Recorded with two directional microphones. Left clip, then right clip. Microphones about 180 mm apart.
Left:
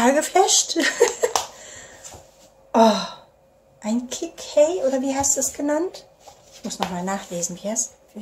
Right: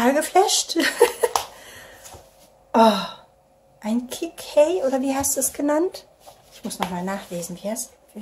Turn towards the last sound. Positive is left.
turn(degrees=0)  # may be behind; listen again after turning